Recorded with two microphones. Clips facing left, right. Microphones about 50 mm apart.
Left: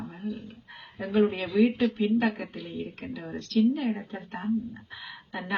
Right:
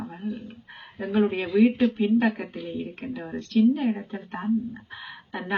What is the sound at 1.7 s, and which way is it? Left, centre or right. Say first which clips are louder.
A woman's voice: right 3 dB; right.